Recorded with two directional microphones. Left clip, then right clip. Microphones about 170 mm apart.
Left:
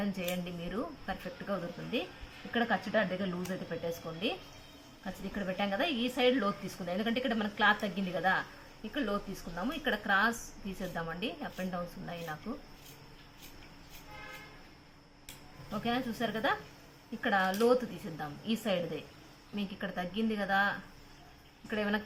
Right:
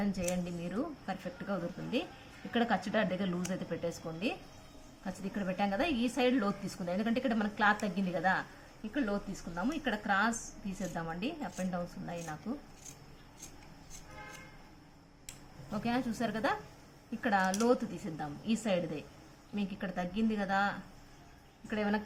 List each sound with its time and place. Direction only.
0.0 s a woman's voice: 10° right (ahead or behind)
15.7 s a woman's voice: 20° right (ahead or behind)